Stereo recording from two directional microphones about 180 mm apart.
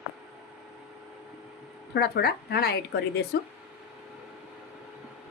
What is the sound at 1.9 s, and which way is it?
A woman's voice, 65° left (ahead or behind).